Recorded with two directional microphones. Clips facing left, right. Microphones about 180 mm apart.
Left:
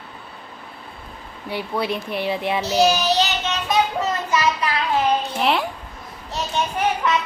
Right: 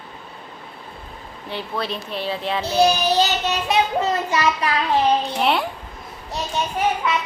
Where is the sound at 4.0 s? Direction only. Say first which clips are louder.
Right 1 dB; 35° right (ahead or behind).